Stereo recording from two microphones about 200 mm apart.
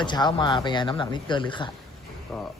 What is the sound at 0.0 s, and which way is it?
Speech, 20° left (ahead or behind).